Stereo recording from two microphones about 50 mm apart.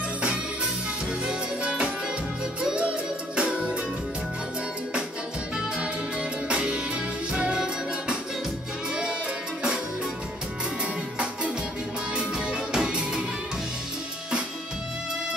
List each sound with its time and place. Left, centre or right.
1.2 s music: centre
5.8 s music: right
12.2 s music: centre